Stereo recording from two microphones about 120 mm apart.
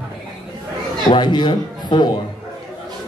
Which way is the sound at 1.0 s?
40° left (ahead or behind).